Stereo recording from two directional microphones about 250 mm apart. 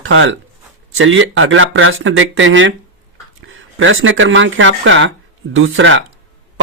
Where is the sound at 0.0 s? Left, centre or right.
Right.